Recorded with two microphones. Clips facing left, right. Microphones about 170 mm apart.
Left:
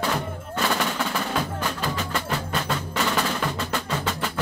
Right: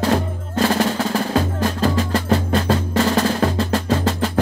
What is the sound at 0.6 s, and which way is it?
Percussion, 35° right (ahead or behind).